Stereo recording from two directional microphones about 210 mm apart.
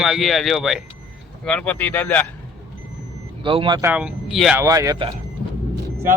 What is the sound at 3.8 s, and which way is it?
Speech, 5° right (ahead or behind).